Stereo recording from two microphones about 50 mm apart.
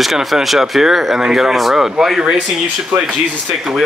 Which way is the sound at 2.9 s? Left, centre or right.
Right.